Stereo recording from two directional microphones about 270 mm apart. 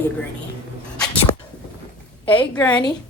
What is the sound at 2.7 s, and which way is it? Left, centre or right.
Speech, centre.